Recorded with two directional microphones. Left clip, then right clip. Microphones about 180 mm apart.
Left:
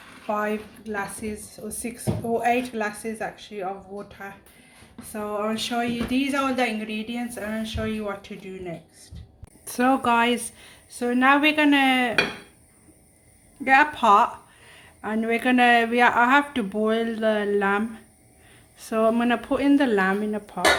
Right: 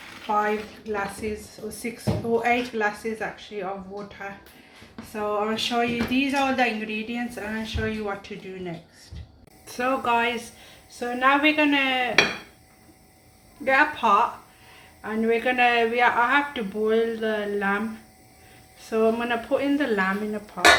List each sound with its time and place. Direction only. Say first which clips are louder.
0.3 s speech: right 3 dB; 40° left (ahead or behind)
5.1 s speech: right 2 dB; 45° left (ahead or behind)
9.6 s speech: left 3 dB; 60° left (ahead or behind)
13.7 s speech: left 2 dB; 65° left (ahead or behind)